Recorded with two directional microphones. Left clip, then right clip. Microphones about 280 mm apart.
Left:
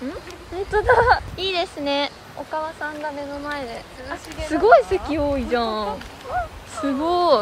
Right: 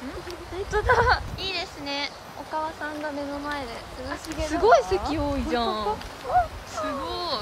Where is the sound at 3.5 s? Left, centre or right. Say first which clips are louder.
Left 3 dB; centre.